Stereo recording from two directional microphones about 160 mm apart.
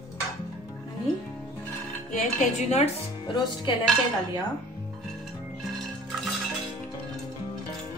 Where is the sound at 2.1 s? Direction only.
50° left (ahead or behind).